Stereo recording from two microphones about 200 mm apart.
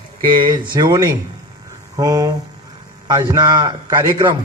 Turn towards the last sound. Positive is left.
turn(degrees=-20)  # may be behind; listen again after turning